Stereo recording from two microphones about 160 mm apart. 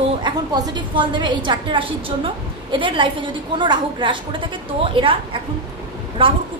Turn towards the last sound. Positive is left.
turn(degrees=-35)  # may be behind; listen again after turning